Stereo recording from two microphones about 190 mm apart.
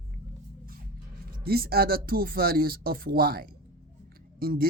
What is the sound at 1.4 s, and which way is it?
Speech, 55° right (ahead or behind).